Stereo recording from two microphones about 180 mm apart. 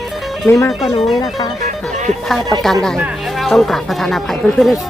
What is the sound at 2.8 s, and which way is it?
Speech, centre (ahead or behind).